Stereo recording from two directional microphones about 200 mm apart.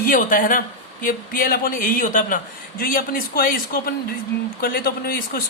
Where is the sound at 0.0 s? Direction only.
45° left (ahead or behind).